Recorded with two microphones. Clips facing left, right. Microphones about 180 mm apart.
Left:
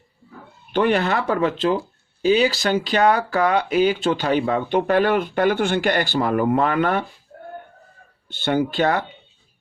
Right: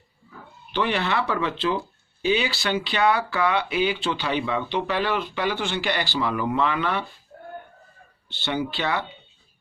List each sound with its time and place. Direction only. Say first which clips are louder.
0.7 s speech: left 6 dB; 50° left (ahead or behind)
8.3 s speech: left 6 dB; 50° left (ahead or behind)